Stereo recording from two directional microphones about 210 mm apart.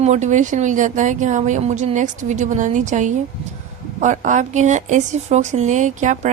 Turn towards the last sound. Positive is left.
turn(degrees=-35)  # may be behind; listen again after turning